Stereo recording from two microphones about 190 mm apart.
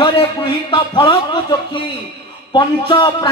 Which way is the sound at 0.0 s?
25° left (ahead or behind).